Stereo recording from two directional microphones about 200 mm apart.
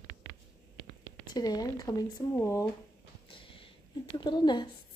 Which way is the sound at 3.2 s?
25° left (ahead or behind).